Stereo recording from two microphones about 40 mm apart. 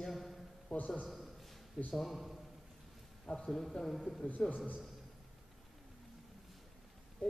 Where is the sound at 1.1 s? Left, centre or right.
Centre.